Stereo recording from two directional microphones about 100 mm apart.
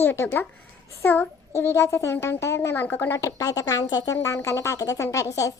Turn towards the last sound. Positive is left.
turn(degrees=30)  # may be behind; listen again after turning